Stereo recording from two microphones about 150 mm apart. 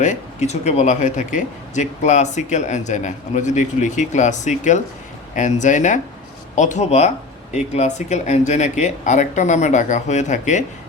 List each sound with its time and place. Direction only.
0.0 s speech: 50° left (ahead or behind)